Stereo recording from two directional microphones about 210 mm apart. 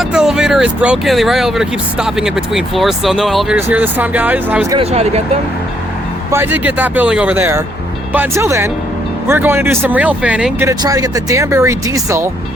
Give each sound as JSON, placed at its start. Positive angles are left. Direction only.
{"t": 0.0, "sound": "speech", "side_deg": -5}
{"t": 4.8, "sound": "speech", "side_deg": -30}
{"t": 6.3, "sound": "speech", "side_deg": -10}